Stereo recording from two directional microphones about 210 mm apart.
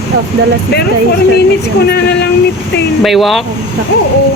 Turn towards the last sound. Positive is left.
turn(degrees=0)  # may be behind; listen again after turning